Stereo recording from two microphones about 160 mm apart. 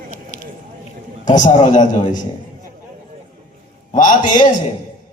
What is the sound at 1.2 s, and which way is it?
A man's voice, 50° left (ahead or behind).